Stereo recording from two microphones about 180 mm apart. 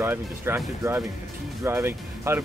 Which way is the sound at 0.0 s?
10° right (ahead or behind).